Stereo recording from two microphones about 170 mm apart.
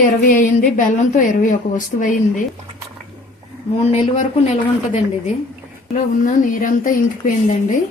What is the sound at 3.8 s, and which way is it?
Speech, 40° left (ahead or behind).